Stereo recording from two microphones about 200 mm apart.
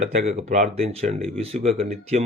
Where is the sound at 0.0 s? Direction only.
35° right (ahead or behind).